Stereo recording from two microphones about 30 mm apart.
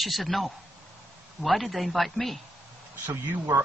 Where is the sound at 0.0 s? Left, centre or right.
Centre.